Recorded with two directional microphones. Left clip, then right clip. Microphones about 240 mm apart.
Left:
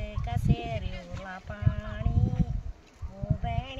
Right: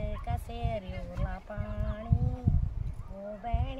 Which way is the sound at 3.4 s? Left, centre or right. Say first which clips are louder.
Left 3 dB; centre.